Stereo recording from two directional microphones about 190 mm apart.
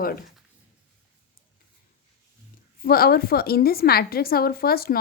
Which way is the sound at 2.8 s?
50° left (ahead or behind).